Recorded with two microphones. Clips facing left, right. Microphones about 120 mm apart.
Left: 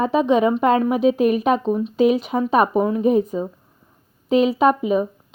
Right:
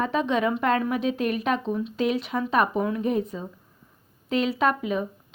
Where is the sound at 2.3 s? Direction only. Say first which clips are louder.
Left 6 dB; 35° left (ahead or behind).